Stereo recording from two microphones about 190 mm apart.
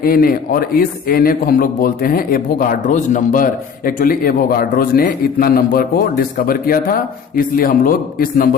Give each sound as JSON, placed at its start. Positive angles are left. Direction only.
{"t": 0.0, "sound": "a man's voice", "side_deg": 50}